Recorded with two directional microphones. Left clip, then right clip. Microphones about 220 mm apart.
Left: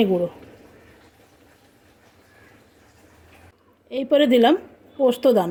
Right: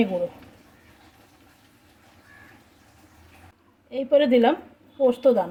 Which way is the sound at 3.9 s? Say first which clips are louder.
Left 1 dB; 45° left (ahead or behind).